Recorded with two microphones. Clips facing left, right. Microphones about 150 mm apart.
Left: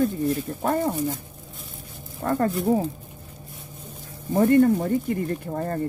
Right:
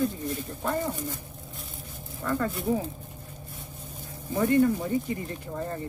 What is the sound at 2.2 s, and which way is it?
Speech, 45° left (ahead or behind).